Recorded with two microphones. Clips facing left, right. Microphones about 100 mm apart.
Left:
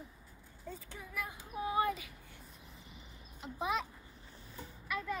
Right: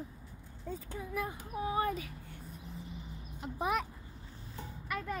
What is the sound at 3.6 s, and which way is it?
Speech, 55° right (ahead or behind).